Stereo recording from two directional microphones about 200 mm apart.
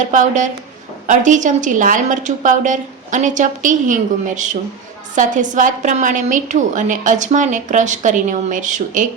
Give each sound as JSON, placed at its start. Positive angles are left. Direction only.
{"t": 0.0, "sound": "a woman's voice", "side_deg": -40}